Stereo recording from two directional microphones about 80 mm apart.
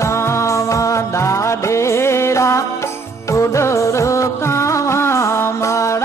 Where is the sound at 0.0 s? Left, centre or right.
Left.